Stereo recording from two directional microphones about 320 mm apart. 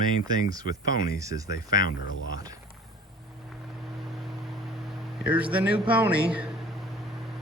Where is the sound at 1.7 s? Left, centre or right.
Left.